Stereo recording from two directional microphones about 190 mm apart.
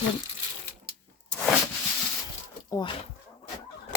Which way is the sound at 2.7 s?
25° left (ahead or behind).